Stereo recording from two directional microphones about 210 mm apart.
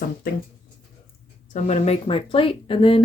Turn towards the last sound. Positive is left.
turn(degrees=25)  # may be behind; listen again after turning